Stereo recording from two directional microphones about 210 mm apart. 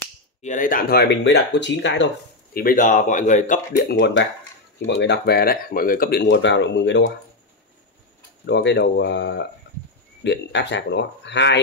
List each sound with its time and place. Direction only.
0.4 s speech: 35° left (ahead or behind); by 2.0 s 60° left (ahead or behind)
2.5 s speech: 40° left (ahead or behind)
4.0 s speech: 55° left (ahead or behind)
8.5 s speech: 55° left (ahead or behind)